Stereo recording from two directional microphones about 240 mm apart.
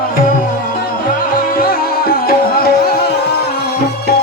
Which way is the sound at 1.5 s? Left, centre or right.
Left.